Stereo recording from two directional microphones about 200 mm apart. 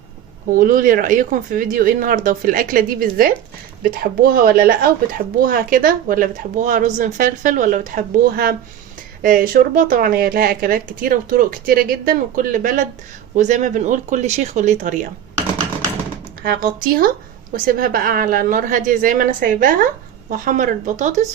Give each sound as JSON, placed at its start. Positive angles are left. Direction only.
{"t": 0.5, "sound": "speech", "side_deg": -45}
{"t": 16.4, "sound": "speech", "side_deg": -45}